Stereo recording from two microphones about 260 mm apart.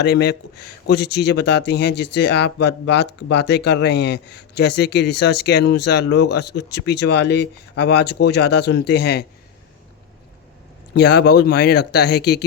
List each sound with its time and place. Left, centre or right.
0.0 s speech: left
10.9 s speech: left